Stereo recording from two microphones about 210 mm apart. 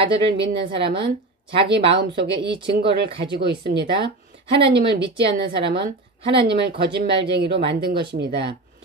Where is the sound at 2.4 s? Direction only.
25° right (ahead or behind).